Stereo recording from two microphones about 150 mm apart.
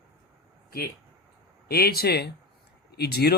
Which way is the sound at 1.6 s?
90° left.